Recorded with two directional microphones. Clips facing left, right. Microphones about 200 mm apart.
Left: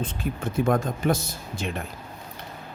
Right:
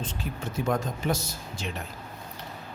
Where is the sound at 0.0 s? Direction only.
55° left (ahead or behind).